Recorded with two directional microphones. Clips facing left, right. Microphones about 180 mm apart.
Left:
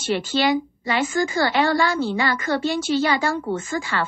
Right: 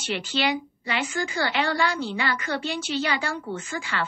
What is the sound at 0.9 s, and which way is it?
A woman's voice, 40° left (ahead or behind).